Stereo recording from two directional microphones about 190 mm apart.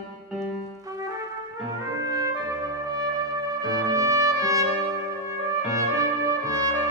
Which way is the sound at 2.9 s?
20° right (ahead or behind).